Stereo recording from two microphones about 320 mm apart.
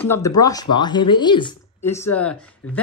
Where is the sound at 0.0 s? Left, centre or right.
Centre.